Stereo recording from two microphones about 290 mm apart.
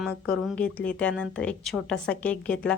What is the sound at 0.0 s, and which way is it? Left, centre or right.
Speech, centre.